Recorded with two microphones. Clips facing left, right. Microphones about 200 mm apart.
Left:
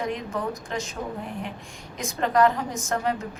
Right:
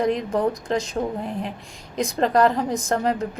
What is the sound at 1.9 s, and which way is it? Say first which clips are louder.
A woman's voice: right 3 dB; 35° right (ahead or behind).